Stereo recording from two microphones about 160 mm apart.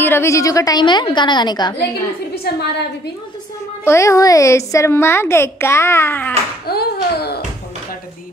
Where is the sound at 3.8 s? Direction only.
20° left (ahead or behind).